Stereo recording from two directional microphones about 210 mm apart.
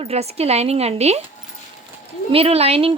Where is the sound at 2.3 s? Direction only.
30° right (ahead or behind).